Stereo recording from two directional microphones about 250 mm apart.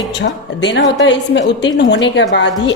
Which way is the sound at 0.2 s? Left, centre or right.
Left.